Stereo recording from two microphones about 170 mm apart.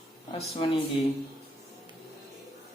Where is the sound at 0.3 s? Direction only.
35° left (ahead or behind).